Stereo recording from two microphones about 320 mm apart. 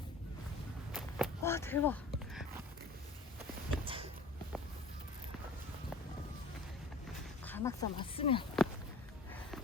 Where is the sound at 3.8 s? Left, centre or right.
Centre.